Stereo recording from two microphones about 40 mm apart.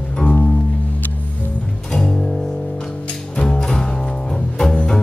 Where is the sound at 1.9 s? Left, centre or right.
Centre.